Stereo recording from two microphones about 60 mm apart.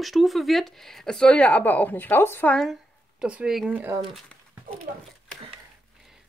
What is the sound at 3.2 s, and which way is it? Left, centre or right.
Speech, centre.